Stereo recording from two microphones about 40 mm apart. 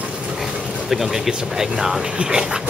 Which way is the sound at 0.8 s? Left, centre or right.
Centre.